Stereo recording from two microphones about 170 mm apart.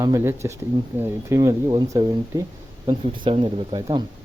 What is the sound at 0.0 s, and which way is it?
Speech, 15° right (ahead or behind).